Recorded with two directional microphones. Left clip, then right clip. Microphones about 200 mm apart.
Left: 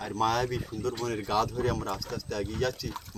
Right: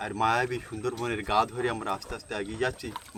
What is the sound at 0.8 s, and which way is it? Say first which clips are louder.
Speech: right 1 dB; 20° right (ahead or behind).